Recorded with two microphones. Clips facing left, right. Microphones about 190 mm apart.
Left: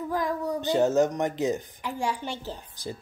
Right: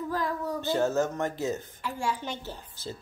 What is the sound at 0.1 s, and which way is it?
A child's voice, 15° left (ahead or behind).